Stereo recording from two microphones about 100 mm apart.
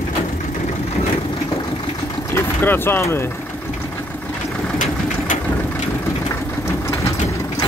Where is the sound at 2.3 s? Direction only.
20° left (ahead or behind).